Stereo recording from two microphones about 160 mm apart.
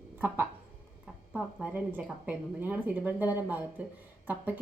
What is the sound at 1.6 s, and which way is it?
Speech, 10° right (ahead or behind).